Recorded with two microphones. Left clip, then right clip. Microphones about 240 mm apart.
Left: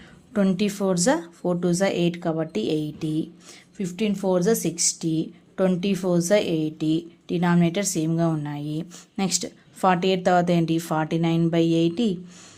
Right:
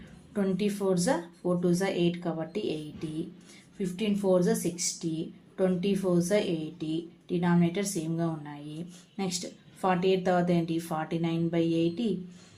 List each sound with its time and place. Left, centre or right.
0.3 s a woman's voice: left